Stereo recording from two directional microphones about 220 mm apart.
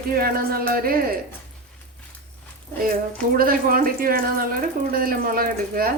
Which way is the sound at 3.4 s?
40° right (ahead or behind).